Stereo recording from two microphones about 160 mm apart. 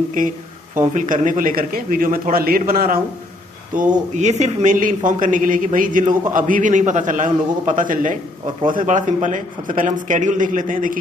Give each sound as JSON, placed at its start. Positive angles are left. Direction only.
{"t": 0.2, "sound": "a man's voice", "side_deg": -55}
{"t": 4.2, "sound": "a man's voice", "side_deg": -45}